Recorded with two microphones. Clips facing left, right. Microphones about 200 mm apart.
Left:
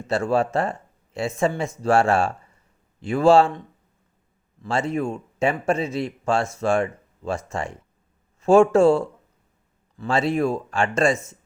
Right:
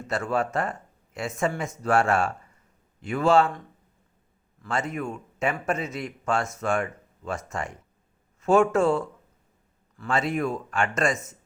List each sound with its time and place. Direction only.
0.1 s speech: 30° left (ahead or behind)
4.6 s speech: 30° left (ahead or behind)